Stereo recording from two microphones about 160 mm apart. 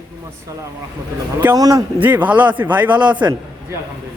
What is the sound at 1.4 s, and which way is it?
Speech, 15° right (ahead or behind).